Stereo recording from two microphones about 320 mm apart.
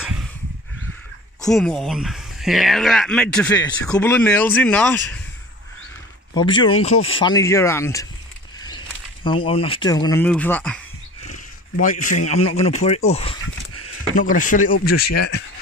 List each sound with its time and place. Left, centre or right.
1.4 s speech: centre
6.3 s speech: centre
11.8 s speech: left
12.2 s a man's voice: left
12.5 s speech: centre